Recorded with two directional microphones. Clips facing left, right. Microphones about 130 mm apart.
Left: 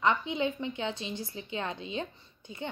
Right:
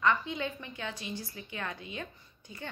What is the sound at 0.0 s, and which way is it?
Speech, 20° left (ahead or behind).